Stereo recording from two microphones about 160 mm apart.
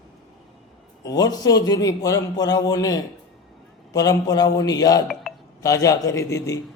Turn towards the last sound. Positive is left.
turn(degrees=20)  # may be behind; listen again after turning